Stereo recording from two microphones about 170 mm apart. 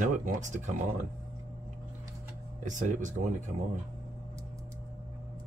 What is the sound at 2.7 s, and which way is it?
Speech, 45° right (ahead or behind).